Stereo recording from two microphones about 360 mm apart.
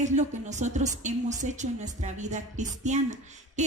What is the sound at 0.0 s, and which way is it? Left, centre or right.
A woman's voice, centre.